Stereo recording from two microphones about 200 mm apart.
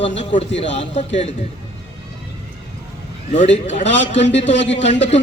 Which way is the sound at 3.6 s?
35° left (ahead or behind).